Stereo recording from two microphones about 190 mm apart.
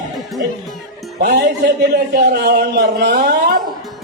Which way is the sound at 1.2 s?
45° right (ahead or behind).